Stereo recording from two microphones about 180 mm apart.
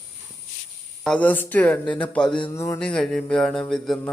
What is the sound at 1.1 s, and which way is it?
Speech, 10° left (ahead or behind).